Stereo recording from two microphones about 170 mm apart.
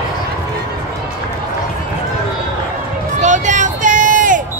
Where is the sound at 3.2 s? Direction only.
45° right (ahead or behind).